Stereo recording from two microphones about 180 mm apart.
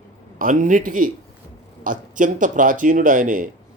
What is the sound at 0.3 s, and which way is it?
Speech, 45° right (ahead or behind).